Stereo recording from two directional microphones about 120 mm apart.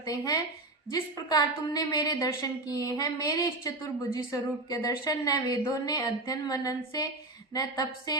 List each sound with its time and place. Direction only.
0.0 s a woman's voice: 30° left (ahead or behind)